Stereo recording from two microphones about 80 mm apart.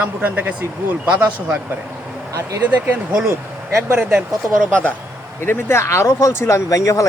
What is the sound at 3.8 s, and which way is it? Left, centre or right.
Speech, right.